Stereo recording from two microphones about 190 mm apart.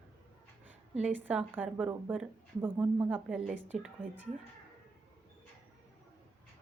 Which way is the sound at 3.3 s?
5° right (ahead or behind).